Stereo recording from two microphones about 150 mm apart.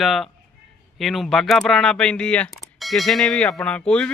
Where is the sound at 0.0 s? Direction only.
Centre (ahead or behind).